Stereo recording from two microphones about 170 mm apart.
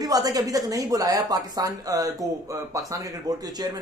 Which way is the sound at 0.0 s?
20° right (ahead or behind).